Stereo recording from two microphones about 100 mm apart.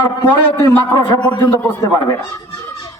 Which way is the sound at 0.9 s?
45° left (ahead or behind).